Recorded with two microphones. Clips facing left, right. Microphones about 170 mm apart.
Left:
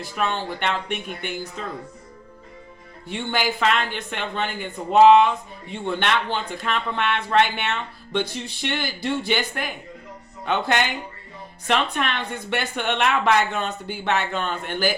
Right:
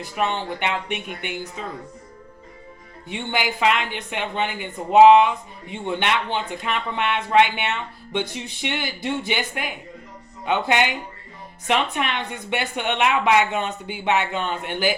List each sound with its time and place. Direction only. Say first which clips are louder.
0.0 s speech: right 1 dB; 20° right (ahead or behind)
3.1 s speech: left 1 dB; 15° right (ahead or behind)